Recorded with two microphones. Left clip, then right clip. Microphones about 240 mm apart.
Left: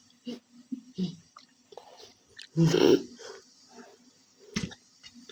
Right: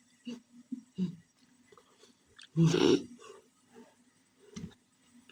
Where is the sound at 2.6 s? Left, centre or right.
Centre.